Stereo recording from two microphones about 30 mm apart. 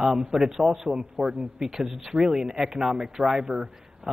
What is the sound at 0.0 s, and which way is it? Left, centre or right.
A man's voice, centre.